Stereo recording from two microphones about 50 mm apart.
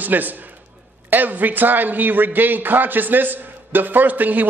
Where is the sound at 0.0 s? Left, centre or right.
Right.